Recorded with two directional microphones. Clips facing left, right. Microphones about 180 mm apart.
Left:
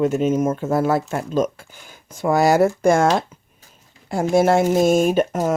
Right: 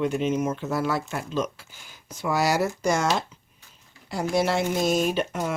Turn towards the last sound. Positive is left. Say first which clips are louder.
# left 7 dB
turn(degrees=45)  # may be behind; listen again after turning